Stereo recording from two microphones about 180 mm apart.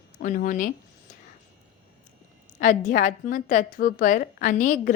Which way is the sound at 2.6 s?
45° left (ahead or behind).